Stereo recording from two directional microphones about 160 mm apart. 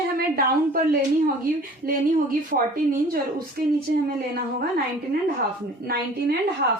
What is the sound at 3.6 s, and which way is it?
Speech, 70° right (ahead or behind).